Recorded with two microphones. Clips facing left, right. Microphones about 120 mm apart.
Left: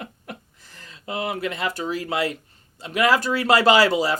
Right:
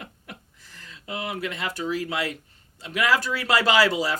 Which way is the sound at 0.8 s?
40° left (ahead or behind).